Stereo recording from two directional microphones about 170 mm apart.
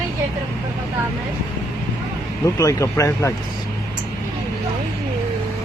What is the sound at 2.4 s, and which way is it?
Speech, 20° left (ahead or behind).